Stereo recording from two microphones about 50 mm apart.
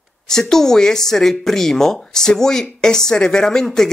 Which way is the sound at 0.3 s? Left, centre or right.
Centre.